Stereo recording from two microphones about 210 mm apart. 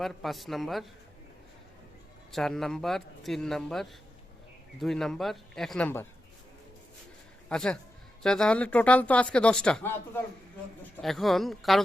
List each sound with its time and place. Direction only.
0.0 s speech: centre (ahead or behind)
2.3 s speech: centre (ahead or behind)
7.5 s speech: 5° left (ahead or behind)
11.0 s speech: centre (ahead or behind)